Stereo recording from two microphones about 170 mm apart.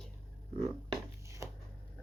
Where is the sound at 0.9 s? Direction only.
15° right (ahead or behind).